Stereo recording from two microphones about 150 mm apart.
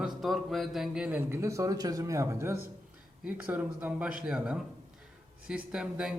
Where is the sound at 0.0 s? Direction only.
Centre (ahead or behind).